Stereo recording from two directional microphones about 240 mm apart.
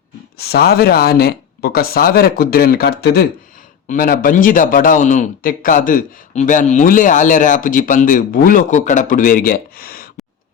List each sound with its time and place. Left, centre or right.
0.3 s speech: left